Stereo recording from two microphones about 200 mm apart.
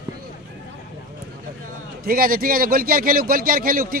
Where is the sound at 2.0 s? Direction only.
45° right (ahead or behind).